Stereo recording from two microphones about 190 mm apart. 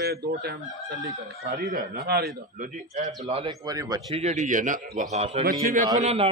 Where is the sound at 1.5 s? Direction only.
50° right (ahead or behind).